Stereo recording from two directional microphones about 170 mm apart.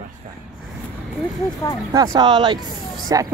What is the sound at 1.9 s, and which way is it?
Speech, 20° right (ahead or behind).